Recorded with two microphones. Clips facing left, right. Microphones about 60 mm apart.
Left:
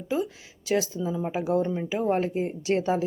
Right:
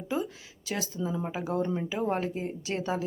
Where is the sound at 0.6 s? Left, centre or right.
Left.